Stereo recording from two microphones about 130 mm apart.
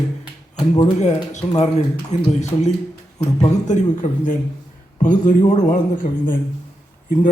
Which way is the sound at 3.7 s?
75° left (ahead or behind).